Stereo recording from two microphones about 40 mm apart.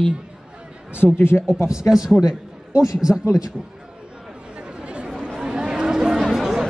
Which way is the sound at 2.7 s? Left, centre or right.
Centre.